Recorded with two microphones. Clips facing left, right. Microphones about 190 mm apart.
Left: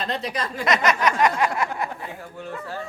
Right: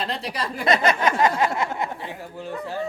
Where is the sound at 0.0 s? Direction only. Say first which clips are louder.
Left 1 dB; 30° right (ahead or behind).